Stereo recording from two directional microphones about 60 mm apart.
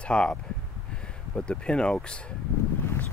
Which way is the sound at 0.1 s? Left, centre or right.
Centre.